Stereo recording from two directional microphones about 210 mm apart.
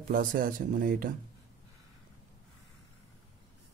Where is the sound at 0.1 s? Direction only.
40° right (ahead or behind).